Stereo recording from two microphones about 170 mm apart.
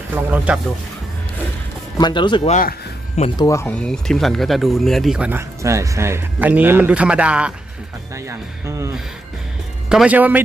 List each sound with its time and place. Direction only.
0.3 s speech: 10° right (ahead or behind)
2.0 s speech: 25° left (ahead or behind)
2.4 s speech: 45° left (ahead or behind)
3.2 s speech: 30° left (ahead or behind)
3.4 s speech: 15° left (ahead or behind); by 7.5 s 5° right (ahead or behind)
8.1 s speech: 15° right (ahead or behind)
9.9 s speech: 5° right (ahead or behind)